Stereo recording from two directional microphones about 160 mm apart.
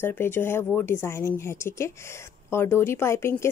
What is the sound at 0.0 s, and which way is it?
A woman's voice, 15° left (ahead or behind).